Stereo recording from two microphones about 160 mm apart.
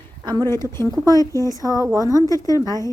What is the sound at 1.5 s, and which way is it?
Speech, 20° right (ahead or behind).